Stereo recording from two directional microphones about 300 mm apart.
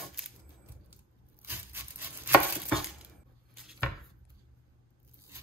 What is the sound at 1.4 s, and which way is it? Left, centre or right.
Chopping, centre.